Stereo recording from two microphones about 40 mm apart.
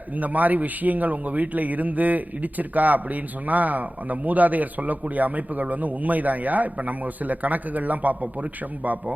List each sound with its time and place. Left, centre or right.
0.2 s a man's voice: right